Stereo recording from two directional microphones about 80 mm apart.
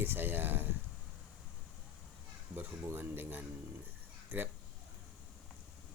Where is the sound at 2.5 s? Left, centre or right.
Right.